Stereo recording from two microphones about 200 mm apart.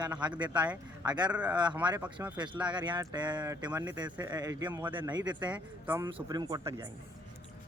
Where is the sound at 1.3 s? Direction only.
5° right (ahead or behind).